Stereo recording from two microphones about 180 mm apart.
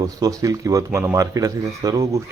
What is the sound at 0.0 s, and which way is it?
Speech, 20° right (ahead or behind).